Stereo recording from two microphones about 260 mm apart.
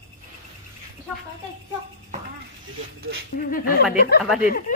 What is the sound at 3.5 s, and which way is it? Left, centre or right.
Speech, left.